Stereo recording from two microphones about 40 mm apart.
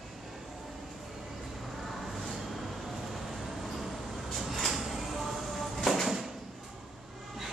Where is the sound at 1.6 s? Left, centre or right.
Centre.